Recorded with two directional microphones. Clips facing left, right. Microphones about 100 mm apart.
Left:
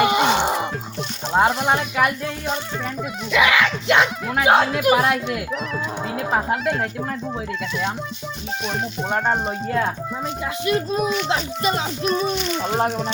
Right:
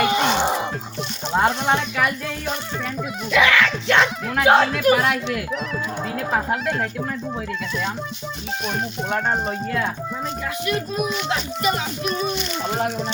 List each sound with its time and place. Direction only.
0.0 s music: 15° left (ahead or behind)
0.3 s music: centre (ahead or behind)
1.3 s speech: 5° left (ahead or behind)
3.3 s speech: 10° left (ahead or behind)
8.6 s speech: 5° left (ahead or behind)
10.4 s speech: 25° left (ahead or behind)